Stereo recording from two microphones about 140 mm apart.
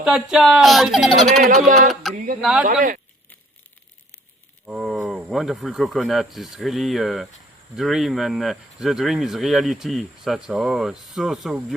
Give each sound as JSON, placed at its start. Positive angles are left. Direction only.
{"t": 0.0, "sound": "speech", "side_deg": -5}
{"t": 1.5, "sound": "a man's voice", "side_deg": -55}
{"t": 2.1, "sound": "a sound", "side_deg": -80}
{"t": 2.4, "sound": "speech", "side_deg": -5}
{"t": 2.6, "sound": "speech", "side_deg": -70}
{"t": 4.6, "sound": "speech", "side_deg": -5}